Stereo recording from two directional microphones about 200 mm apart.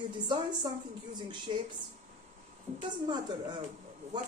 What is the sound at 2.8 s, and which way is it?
Speech, 20° right (ahead or behind).